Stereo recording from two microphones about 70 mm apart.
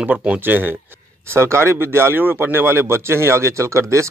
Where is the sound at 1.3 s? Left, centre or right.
Right.